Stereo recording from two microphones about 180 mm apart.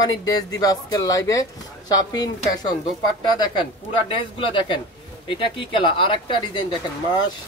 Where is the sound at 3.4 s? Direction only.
25° left (ahead or behind).